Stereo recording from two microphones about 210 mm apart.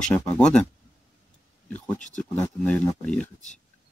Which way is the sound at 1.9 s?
35° left (ahead or behind).